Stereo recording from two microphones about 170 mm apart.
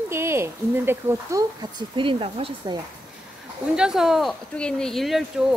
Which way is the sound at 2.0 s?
30° right (ahead or behind).